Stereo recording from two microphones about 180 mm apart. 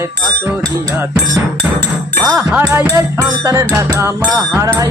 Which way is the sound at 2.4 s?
10° right (ahead or behind).